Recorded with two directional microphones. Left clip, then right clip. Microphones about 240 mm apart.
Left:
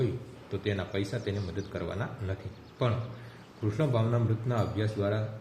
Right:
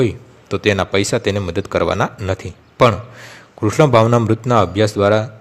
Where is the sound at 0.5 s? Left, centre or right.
Right.